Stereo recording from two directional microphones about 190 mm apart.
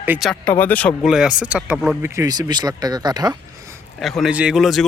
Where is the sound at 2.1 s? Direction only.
20° right (ahead or behind).